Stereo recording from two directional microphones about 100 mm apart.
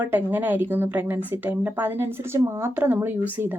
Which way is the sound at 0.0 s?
20° right (ahead or behind).